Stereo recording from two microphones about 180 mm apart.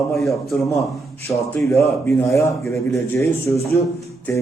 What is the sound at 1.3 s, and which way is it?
A man's voice, 15° left (ahead or behind).